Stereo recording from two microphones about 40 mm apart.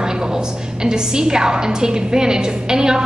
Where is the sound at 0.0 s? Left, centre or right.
Centre.